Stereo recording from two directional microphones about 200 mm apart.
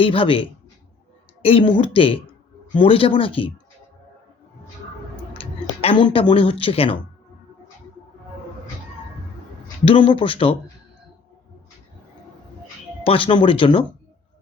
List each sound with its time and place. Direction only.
0.0 s speech: 25° left (ahead or behind)
5.4 s speech: 25° left (ahead or behind)
9.8 s speech: 25° left (ahead or behind)
13.1 s speech: 25° left (ahead or behind)